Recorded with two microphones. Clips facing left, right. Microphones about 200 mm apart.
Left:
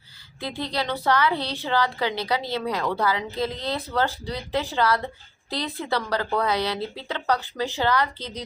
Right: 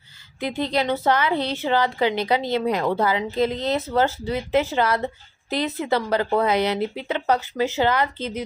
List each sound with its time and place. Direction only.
0.3 s a woman's voice: 15° right (ahead or behind)